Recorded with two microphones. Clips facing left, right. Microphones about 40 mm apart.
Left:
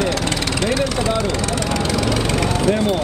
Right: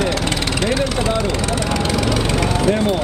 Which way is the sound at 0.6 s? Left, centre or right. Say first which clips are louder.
Even; right.